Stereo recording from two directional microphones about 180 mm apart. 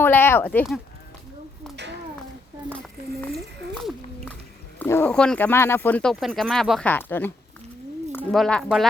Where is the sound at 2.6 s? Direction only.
5° left (ahead or behind).